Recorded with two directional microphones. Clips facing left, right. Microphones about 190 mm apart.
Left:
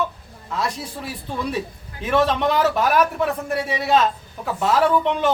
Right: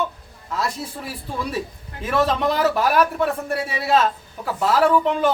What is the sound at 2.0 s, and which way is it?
A man's voice, 5° right (ahead or behind).